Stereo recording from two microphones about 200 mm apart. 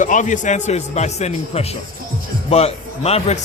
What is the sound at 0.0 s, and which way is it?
A man's voice, 40° left (ahead or behind).